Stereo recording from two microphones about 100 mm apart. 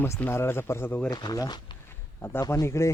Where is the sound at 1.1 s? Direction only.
40° left (ahead or behind).